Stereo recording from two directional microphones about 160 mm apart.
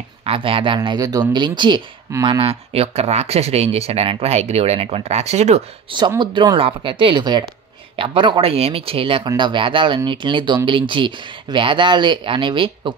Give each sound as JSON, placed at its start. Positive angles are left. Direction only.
{"t": 0.2, "sound": "speech", "side_deg": -35}
{"t": 5.9, "sound": "speech", "side_deg": -25}